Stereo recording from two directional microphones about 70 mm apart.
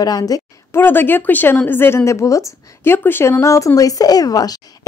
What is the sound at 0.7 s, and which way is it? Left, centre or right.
A woman's voice, left.